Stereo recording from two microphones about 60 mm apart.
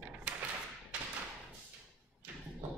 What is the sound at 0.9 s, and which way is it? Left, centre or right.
Thump, centre.